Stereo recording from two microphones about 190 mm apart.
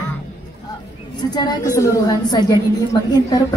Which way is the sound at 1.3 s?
20° left (ahead or behind).